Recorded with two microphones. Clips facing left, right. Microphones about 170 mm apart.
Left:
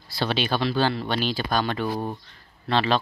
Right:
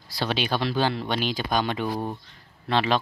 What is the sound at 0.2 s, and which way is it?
Speech, 10° right (ahead or behind).